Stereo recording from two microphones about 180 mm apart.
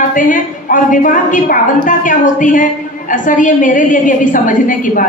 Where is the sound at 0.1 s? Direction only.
45° left (ahead or behind).